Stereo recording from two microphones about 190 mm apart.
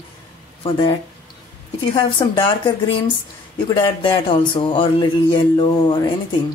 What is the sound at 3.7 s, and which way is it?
Speech, 25° left (ahead or behind).